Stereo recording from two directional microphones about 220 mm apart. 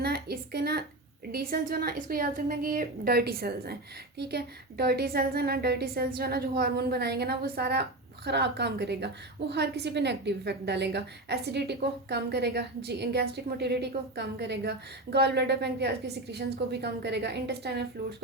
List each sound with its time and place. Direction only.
0.0 s a woman's voice: 45° right (ahead or behind)